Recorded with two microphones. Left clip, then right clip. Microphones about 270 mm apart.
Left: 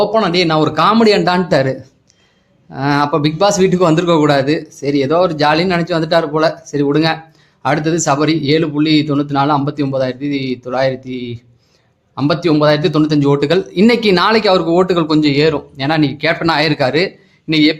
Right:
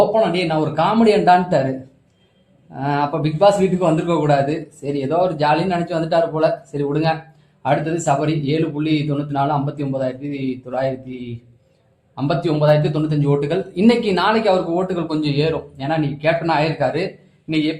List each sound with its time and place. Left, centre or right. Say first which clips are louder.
0.1 s speech: left 4 dB; left
2.7 s speech: left 6 dB; left